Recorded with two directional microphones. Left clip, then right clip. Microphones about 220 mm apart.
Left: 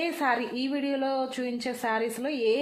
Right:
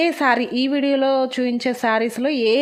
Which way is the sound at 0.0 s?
45° right (ahead or behind).